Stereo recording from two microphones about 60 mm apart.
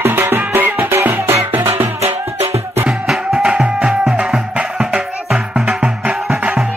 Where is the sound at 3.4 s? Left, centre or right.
Centre.